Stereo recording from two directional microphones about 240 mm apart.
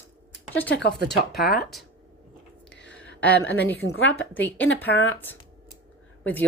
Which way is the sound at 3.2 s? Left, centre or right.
Centre.